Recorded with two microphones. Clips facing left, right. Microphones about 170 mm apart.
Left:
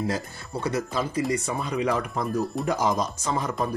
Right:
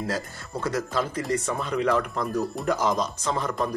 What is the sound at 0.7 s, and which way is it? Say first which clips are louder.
Speech: even; 10° left (ahead or behind).